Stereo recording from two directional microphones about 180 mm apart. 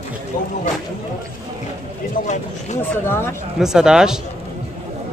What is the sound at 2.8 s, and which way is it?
Speech, 15° left (ahead or behind).